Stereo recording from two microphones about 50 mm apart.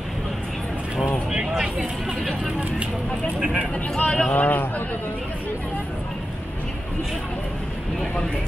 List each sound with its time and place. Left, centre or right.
1.3 s vehicle: centre
4.0 s speech: centre
4.3 s a man's voice: left